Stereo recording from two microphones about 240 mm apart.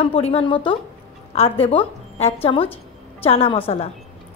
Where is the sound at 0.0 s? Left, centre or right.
Left.